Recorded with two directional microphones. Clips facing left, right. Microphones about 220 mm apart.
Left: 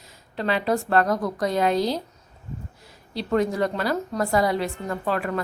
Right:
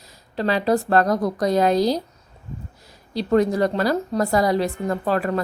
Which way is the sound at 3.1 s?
35° right (ahead or behind).